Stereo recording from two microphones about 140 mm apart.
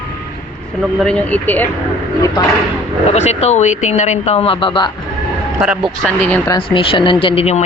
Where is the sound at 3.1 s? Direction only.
55° left (ahead or behind); by 4.9 s 35° left (ahead or behind).